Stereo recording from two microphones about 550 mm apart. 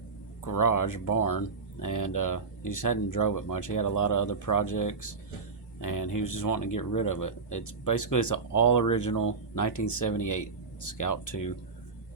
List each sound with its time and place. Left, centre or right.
0.4 s speech: left